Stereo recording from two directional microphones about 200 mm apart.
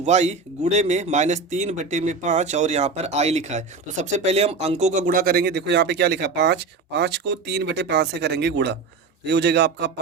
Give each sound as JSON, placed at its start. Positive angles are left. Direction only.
{"t": 0.0, "sound": "a man's voice", "side_deg": -35}